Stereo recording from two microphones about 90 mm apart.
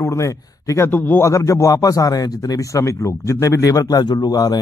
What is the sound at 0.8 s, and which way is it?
Speech, 20° left (ahead or behind).